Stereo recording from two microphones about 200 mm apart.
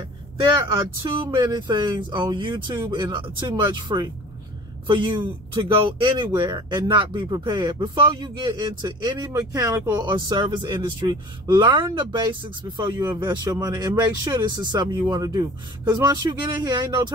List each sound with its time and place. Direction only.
0.7 s speech: 25° right (ahead or behind)